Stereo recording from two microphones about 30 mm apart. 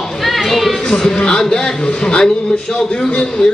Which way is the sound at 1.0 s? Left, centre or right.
Left.